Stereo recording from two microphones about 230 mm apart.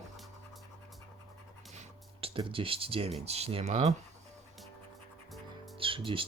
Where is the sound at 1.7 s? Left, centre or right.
Right.